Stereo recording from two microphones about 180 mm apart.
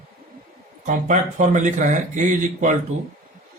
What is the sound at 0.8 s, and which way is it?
Speech, 45° right (ahead or behind).